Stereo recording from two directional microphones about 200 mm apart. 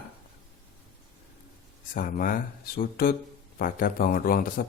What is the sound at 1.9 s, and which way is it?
Speech, 45° left (ahead or behind).